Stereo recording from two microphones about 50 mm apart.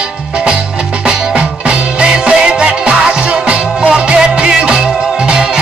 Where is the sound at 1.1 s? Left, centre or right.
Centre.